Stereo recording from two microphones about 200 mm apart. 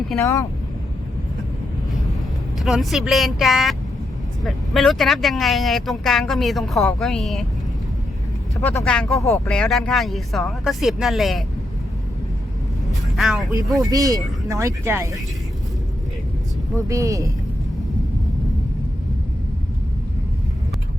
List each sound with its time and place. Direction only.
0.2 s speech: 15° left (ahead or behind)
2.6 s speech: centre (ahead or behind)
8.9 s speech: 5° left (ahead or behind)
9.6 s speech: 5° left (ahead or behind)
12.9 s vehicle: centre (ahead or behind)
13.7 s speech: centre (ahead or behind)
13.9 s speech: 15° right (ahead or behind)
16.7 s speech: 15° right (ahead or behind)